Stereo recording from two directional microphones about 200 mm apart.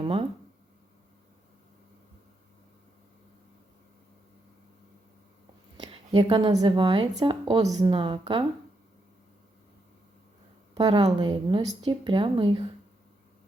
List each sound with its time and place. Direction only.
0.0 s speech: 25° right (ahead or behind)
5.7 s a woman's voice: 20° right (ahead or behind)
10.8 s speech: 20° right (ahead or behind)